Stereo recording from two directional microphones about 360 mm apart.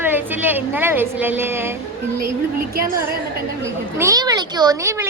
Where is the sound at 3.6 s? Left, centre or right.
Centre.